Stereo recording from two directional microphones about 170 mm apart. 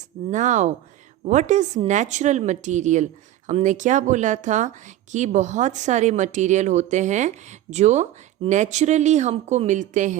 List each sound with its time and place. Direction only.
0.3 s speech: 45° right (ahead or behind)